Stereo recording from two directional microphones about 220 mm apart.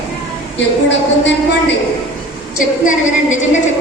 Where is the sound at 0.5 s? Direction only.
55° left (ahead or behind).